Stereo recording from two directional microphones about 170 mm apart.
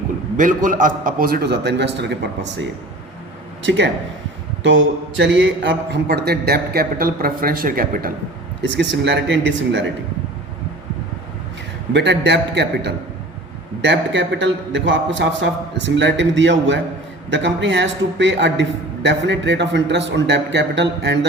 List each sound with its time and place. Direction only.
0.3 s a man's voice: 50° right (ahead or behind); by 2.1 s 90° right
3.6 s a man's voice: 90° right; by 8.1 s 55° right (ahead or behind)
8.7 s a man's voice: 90° right
11.9 s a man's voice: 90° right